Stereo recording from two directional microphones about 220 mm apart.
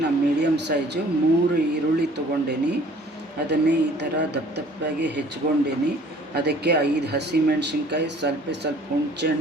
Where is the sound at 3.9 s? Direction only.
50° right (ahead or behind).